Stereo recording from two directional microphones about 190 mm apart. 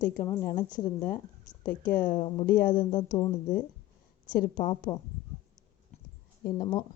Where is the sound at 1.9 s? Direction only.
45° left (ahead or behind).